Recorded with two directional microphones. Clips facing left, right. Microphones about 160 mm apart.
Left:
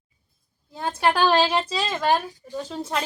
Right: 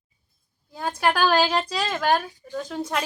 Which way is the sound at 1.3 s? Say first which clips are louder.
Left 1 dB; 5° right (ahead or behind).